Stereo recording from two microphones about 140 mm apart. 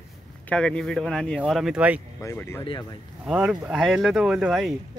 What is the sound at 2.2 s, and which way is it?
Speech, 20° left (ahead or behind).